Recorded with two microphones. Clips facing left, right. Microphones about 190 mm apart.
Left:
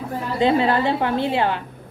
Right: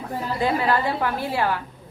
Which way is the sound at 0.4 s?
25° left (ahead or behind).